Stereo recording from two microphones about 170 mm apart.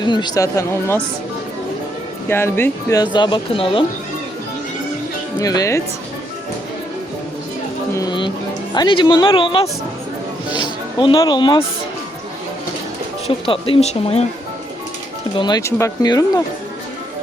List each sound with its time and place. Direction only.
0.0 s speech: 25° left (ahead or behind)
2.3 s speech: 15° left (ahead or behind); by 3.8 s 30° left (ahead or behind)
5.4 s speech: 20° left (ahead or behind)
7.9 s speech: 25° left (ahead or behind)
13.2 s speech: 30° left (ahead or behind)
15.4 s speech: 25° left (ahead or behind)